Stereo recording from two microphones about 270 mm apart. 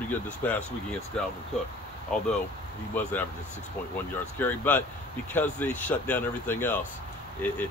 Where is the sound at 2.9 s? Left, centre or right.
Centre.